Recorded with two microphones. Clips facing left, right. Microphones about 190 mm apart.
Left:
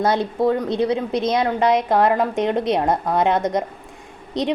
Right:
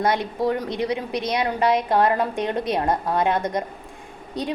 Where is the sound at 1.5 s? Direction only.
20° left (ahead or behind).